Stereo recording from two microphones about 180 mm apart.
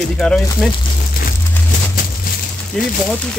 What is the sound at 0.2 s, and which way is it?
Speech, 5° left (ahead or behind).